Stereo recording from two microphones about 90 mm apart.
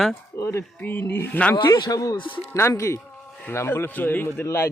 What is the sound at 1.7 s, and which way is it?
Speech, 55° left (ahead or behind).